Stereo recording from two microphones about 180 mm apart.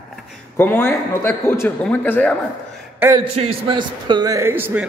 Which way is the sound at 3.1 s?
30° right (ahead or behind).